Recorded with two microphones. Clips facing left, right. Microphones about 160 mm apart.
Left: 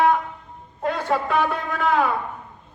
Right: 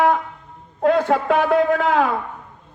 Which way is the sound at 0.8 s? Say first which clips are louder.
Right 6 dB; 90° right.